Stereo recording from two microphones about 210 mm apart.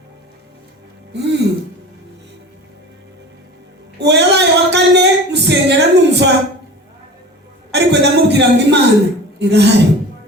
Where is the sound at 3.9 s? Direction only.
55° right (ahead or behind).